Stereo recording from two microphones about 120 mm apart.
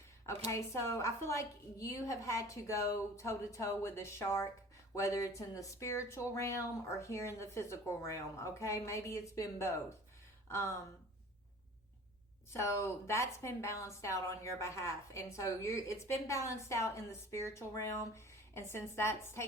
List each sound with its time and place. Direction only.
0.3 s a woman's voice: 25° left (ahead or behind)
12.5 s a woman's voice: 25° left (ahead or behind)